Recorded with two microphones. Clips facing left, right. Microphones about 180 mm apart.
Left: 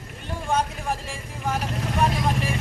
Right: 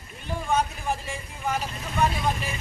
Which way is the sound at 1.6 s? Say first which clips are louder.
Left 2 dB; 80° left.